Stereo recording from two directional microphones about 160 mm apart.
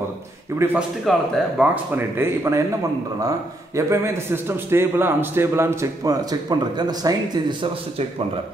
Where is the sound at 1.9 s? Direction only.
15° right (ahead or behind).